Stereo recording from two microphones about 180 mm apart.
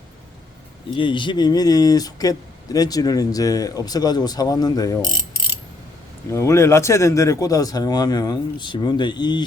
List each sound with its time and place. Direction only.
0.9 s speech: 25° left (ahead or behind)
6.3 s speech: 15° left (ahead or behind)